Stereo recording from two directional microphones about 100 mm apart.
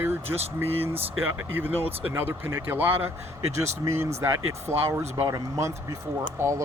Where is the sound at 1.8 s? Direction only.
80° right.